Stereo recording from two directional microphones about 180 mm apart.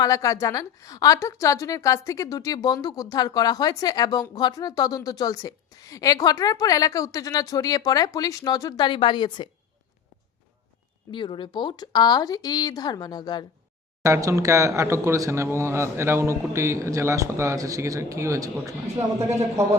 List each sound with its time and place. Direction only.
0.0 s a woman's voice: 20° left (ahead or behind)
11.1 s a woman's voice: 25° left (ahead or behind)
14.0 s a man's voice: 15° right (ahead or behind)